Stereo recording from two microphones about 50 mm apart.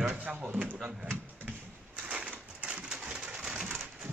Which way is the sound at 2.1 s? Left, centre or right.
Right.